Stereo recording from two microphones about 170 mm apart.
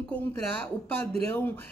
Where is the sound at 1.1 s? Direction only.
10° left (ahead or behind).